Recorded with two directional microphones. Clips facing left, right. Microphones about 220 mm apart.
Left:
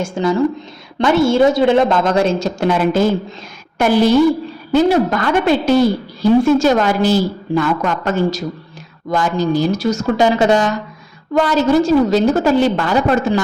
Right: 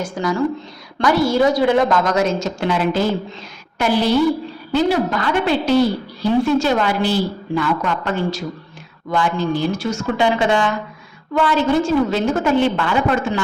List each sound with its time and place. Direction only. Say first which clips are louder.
0.0 s a woman's voice: left 4 dB; 25° left (ahead or behind)
2.6 s a woman's voice: left 5 dB; 45° left (ahead or behind)
4.7 s a woman's voice: left 4 dB; 45° left (ahead or behind)